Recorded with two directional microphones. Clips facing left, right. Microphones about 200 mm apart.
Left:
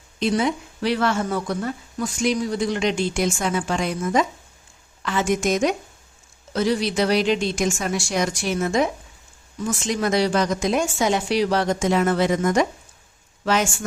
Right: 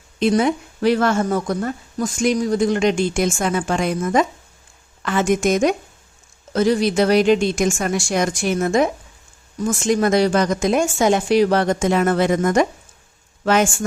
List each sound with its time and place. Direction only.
0.2 s speech: 55° right (ahead or behind)